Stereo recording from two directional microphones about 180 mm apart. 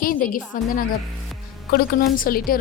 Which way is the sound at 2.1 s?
50° left (ahead or behind).